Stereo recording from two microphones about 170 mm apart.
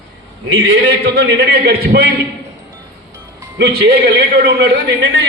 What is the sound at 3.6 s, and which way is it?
A man's voice, 70° right (ahead or behind).